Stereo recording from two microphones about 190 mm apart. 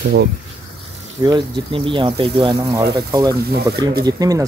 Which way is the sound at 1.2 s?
25° right (ahead or behind).